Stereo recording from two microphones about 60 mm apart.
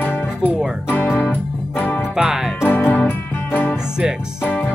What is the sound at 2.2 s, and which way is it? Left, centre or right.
Music, centre.